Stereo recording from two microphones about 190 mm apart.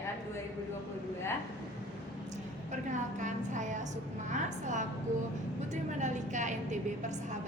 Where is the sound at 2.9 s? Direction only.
40° right (ahead or behind).